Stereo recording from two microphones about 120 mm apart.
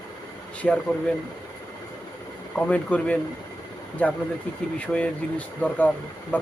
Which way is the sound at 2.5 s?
10° left (ahead or behind).